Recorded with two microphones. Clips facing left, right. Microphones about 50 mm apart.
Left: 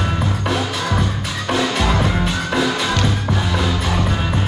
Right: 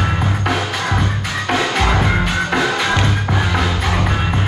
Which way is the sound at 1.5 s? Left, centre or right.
Right.